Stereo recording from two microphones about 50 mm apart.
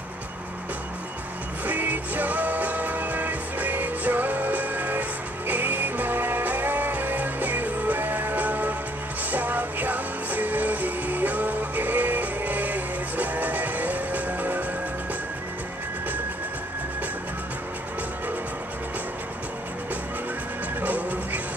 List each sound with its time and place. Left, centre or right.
1.7 s music: right
20.8 s music: right